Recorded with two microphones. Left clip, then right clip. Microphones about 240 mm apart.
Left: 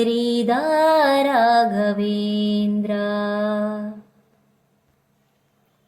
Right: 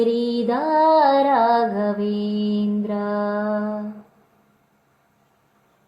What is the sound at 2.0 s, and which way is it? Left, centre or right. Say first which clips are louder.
Mantra: left 1 dB; left.